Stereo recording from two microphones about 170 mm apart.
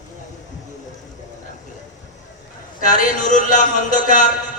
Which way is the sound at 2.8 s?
50° left (ahead or behind).